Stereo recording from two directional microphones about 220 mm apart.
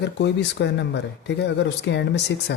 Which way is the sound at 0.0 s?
50° left (ahead or behind).